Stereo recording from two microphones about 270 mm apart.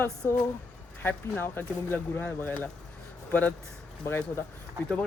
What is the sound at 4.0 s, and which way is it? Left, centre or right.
Speech, centre.